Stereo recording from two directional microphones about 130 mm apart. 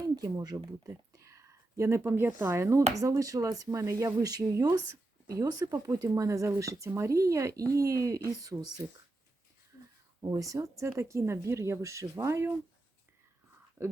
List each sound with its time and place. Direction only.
0.2 s speech: 30° right (ahead or behind)
10.2 s speech: 30° right (ahead or behind)
13.8 s speech: 20° right (ahead or behind)